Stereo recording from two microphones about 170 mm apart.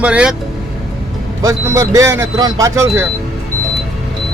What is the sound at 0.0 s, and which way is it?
Speech, 5° right (ahead or behind).